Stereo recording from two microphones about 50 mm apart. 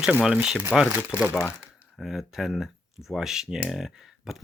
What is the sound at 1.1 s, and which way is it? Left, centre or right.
Speech, right.